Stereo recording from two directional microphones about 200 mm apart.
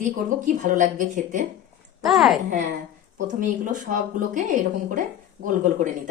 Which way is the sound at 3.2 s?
40° right (ahead or behind).